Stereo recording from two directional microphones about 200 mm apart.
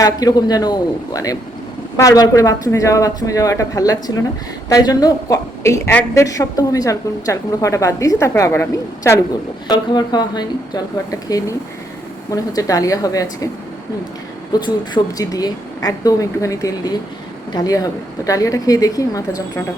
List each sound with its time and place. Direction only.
0.0 s a man's voice: 20° left (ahead or behind)
9.6 s a man's voice: 20° left (ahead or behind)
14.5 s a woman's voice: 20° left (ahead or behind)